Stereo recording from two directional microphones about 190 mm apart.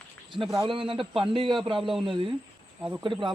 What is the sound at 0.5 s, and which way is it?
Speech, 25° right (ahead or behind).